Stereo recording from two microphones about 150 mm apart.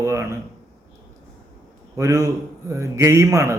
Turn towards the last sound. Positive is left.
turn(degrees=-20)  # may be behind; listen again after turning